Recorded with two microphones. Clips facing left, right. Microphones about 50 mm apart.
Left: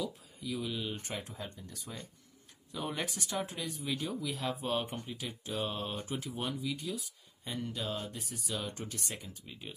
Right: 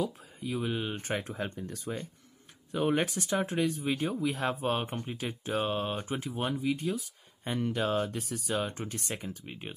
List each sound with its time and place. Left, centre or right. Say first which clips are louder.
0.0 s speech: right 5 dB; right
1.2 s speech: right 8 dB; right
2.7 s speech: right 9 dB; right
3.9 s speech: right 6 dB; right
7.0 s speech: right 5 dB; right
8.5 s speech: right 5 dB; right
9.0 s speech: right 6 dB; right